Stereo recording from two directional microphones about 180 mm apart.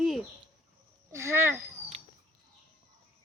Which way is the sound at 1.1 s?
15° right (ahead or behind).